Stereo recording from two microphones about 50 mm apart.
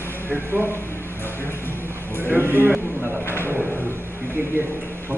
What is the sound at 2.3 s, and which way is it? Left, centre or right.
Speech, right.